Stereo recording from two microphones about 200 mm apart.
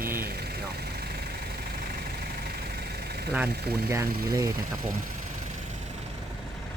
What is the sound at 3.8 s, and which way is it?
Speech, 15° right (ahead or behind).